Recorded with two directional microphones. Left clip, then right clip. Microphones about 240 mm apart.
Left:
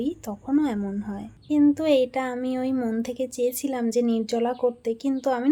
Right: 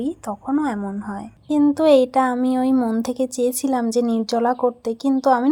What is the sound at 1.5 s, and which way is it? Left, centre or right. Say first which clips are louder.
Speech: right 5 dB; right.